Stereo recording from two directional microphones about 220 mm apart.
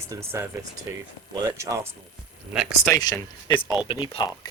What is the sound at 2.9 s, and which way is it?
Speech, 15° left (ahead or behind).